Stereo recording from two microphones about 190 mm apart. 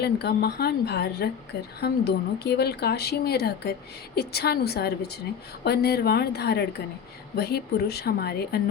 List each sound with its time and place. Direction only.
0.0 s speech: 60° left (ahead or behind)